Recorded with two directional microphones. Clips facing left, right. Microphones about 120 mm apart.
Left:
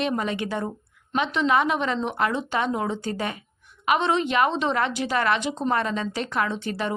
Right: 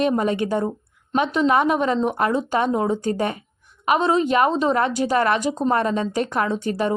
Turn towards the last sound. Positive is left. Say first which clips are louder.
# right 4 dB
turn(degrees=-45)  # may be behind; listen again after turning